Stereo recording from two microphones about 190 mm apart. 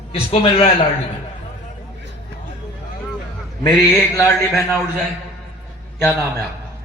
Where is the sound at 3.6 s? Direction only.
15° left (ahead or behind).